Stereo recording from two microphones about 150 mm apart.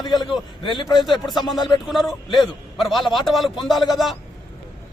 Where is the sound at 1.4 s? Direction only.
Centre (ahead or behind).